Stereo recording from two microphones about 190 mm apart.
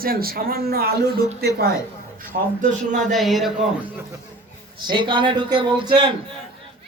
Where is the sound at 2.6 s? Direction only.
40° right (ahead or behind).